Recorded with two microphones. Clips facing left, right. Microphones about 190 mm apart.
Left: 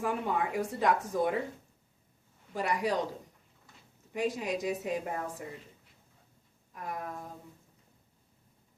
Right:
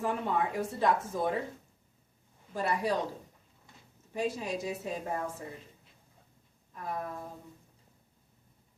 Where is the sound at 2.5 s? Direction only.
15° left (ahead or behind).